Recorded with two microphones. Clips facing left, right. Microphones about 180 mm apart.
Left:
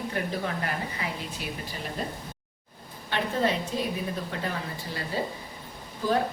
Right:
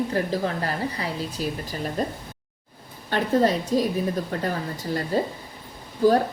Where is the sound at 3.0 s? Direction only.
40° right (ahead or behind).